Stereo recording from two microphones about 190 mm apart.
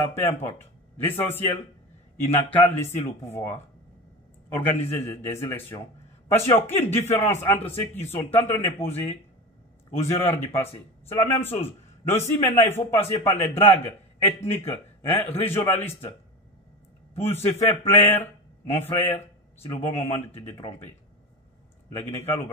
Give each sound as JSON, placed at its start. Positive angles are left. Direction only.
{"t": 0.2, "sound": "speech", "side_deg": 15}
{"t": 17.1, "sound": "speech", "side_deg": 10}
{"t": 21.9, "sound": "speech", "side_deg": 10}